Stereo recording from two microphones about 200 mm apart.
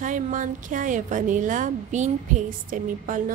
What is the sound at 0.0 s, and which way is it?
A woman's voice, 40° right (ahead or behind).